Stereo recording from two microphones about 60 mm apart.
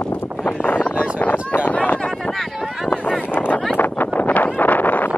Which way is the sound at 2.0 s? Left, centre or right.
Centre.